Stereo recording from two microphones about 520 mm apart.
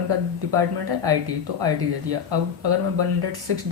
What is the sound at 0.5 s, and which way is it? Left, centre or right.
Speech, right.